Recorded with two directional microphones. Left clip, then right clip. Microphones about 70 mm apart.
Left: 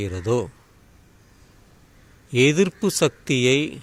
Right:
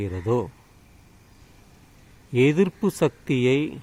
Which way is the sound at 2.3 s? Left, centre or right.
Centre.